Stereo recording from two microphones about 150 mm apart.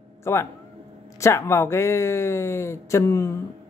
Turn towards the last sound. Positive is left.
turn(degrees=20)  # may be behind; listen again after turning